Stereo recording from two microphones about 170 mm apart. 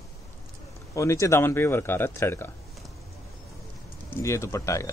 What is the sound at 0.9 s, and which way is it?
Speech, 15° left (ahead or behind).